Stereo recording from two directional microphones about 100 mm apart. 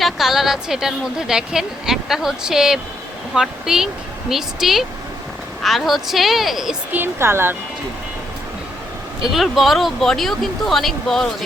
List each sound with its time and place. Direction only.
0.0 s a woman's voice: 5° right (ahead or behind)
6.9 s speech: 25° right (ahead or behind)
9.2 s a woman's voice: centre (ahead or behind)